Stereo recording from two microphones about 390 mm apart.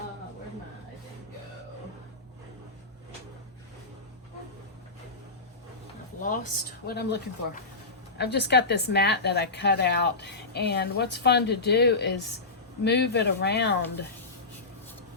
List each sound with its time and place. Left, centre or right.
6.2 s a woman's voice: left